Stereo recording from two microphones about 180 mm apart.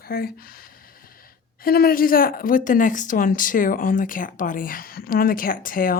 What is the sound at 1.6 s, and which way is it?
Speech, 55° left (ahead or behind).